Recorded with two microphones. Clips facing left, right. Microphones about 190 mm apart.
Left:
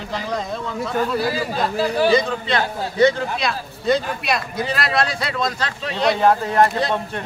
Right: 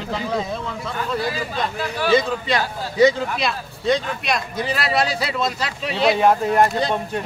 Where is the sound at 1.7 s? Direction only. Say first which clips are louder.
Left 6 dB; 35° left (ahead or behind).